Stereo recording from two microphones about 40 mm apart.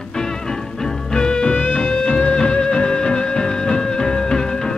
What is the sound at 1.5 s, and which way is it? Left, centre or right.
Music, left.